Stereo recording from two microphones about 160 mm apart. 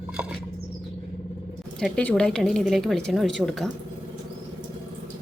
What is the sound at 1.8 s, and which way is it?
A woman's voice, 5° left (ahead or behind).